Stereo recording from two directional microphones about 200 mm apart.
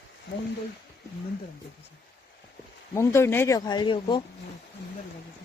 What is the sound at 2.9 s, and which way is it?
Speech, 15° left (ahead or behind).